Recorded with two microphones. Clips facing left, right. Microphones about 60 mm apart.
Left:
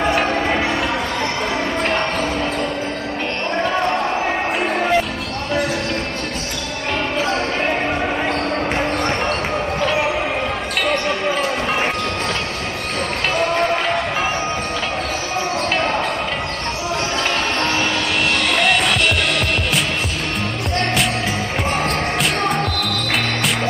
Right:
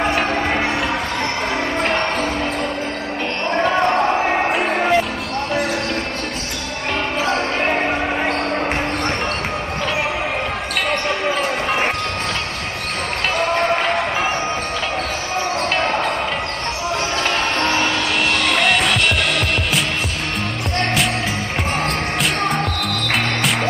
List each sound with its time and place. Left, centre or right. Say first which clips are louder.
0.1 s basketball bounce: left 1 dB; centre
1.8 s basketball bounce: right 1 dB; centre
3.6 s basketball bounce: right 4 dB; centre
4.6 s music: right 1 dB; centre
7.2 s basketball bounce: right 1 dB; centre
9.8 s basketball bounce: left 2 dB; centre
13.4 s basketball bounce: right 1 dB; centre
15.7 s basketball bounce: even; centre
17.6 s music: right 1 dB; centre
21.8 s music: left 1 dB; centre